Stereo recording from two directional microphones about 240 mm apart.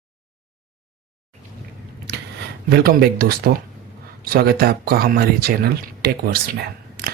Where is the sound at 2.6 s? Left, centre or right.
Right.